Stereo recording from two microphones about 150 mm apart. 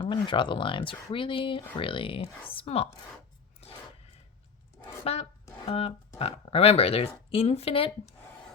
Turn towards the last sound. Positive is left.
turn(degrees=40)  # may be behind; listen again after turning